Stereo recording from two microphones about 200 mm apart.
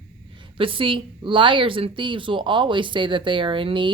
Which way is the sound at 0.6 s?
25° right (ahead or behind).